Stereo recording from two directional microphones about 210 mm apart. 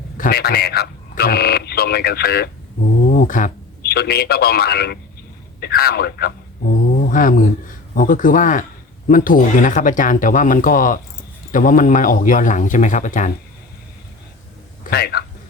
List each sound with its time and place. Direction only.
0.2 s a man's voice: 50° left (ahead or behind)
6.7 s a sound: 40° left (ahead or behind)
7.9 s speech: 40° left (ahead or behind)
14.8 s a man's voice: 50° left (ahead or behind)